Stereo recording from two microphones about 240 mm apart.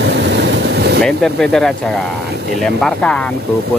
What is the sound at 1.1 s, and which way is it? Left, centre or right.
Speech, centre.